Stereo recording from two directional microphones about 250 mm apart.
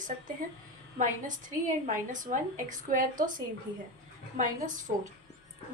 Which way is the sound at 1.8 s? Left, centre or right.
Right.